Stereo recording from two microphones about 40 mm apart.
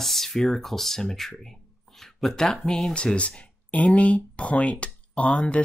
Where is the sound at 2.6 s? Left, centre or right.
Centre.